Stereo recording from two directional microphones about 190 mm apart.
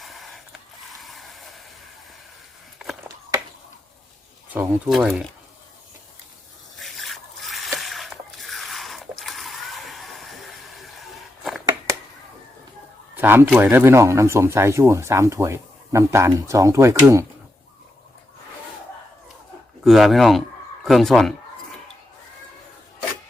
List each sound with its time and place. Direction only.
0.0 s a sound: centre (ahead or behind)
4.5 s speech: centre (ahead or behind)
6.7 s zipper: centre (ahead or behind)
11.9 s a sound: 15° right (ahead or behind)
13.1 s speech: 10° right (ahead or behind)
19.8 s speech: centre (ahead or behind)